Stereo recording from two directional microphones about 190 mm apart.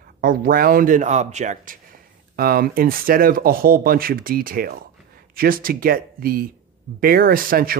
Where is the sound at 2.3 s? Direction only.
50° right (ahead or behind).